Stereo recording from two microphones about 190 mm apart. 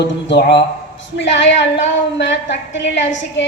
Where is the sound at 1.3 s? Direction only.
70° left (ahead or behind).